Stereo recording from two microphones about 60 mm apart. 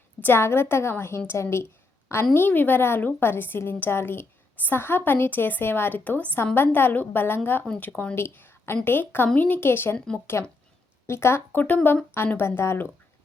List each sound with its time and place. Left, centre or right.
0.3 s a woman's voice: left
2.3 s a woman's voice: left
8.1 s a woman's voice: left
10.3 s a woman's voice: left
11.5 s a woman's voice: left